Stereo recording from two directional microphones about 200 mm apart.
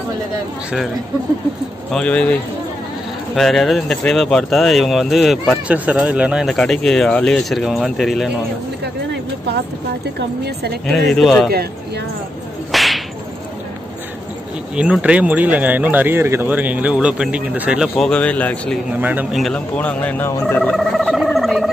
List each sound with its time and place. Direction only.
1.9 s speech: 5° left (ahead or behind)
3.3 s speech: centre (ahead or behind)
10.1 s speech: 55° right (ahead or behind)
10.9 s speech: centre (ahead or behind)
12.7 s whip: centre (ahead or behind)
14.8 s speech: 5° right (ahead or behind)
18.9 s turkey: 10° right (ahead or behind)